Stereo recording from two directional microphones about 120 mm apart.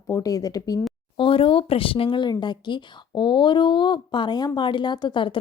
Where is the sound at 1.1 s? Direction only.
45° left (ahead or behind).